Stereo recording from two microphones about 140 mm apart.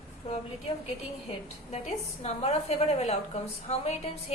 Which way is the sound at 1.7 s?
50° left (ahead or behind).